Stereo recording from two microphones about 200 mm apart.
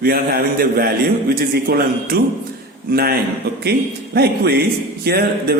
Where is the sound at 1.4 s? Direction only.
50° right (ahead or behind).